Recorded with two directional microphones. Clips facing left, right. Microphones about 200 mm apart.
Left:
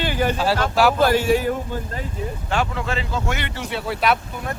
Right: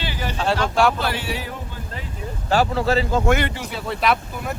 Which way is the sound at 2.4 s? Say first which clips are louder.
Right 6 dB; 35° right (ahead or behind).